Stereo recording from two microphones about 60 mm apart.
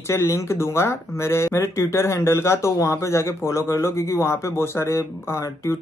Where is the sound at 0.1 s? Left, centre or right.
Left.